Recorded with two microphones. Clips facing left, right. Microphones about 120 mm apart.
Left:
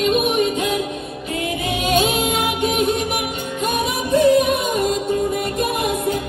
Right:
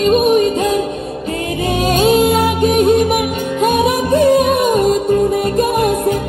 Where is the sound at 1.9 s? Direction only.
40° right (ahead or behind).